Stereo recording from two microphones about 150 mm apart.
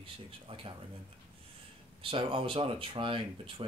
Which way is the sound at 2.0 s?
35° right (ahead or behind).